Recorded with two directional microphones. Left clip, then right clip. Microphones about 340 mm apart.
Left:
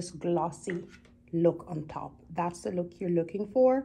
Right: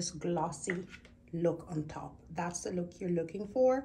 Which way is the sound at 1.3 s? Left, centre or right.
Centre.